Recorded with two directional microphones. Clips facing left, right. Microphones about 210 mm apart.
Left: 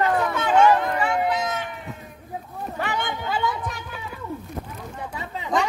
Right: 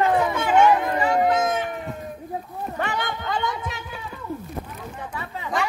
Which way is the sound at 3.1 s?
5° left (ahead or behind).